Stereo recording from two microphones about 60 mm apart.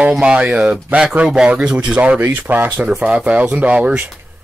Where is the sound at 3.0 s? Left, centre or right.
Right.